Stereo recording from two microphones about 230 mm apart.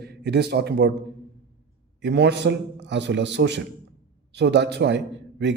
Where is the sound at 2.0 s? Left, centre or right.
Right.